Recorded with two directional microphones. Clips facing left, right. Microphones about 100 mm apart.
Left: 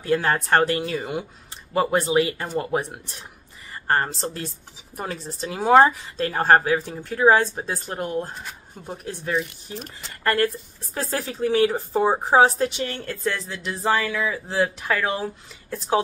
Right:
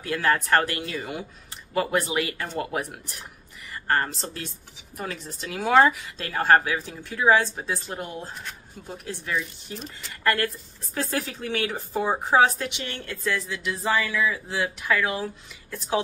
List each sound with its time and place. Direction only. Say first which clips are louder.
0.0 s a woman's voice: left 2 dB; 30° left (ahead or behind); by 8.3 s 50° left (ahead or behind)
8.8 s a woman's voice: left 4 dB; 30° left (ahead or behind)
11.0 s a woman's voice: left 3 dB; 35° left (ahead or behind)